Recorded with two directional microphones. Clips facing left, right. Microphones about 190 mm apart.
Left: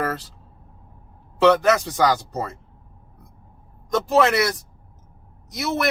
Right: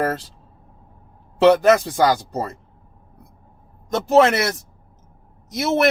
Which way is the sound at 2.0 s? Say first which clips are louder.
Right 2 dB; 30° right (ahead or behind).